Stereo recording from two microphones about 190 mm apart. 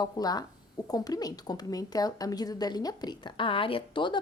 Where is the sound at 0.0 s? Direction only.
20° left (ahead or behind).